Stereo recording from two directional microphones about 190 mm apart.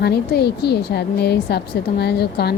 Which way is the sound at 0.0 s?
60° left (ahead or behind).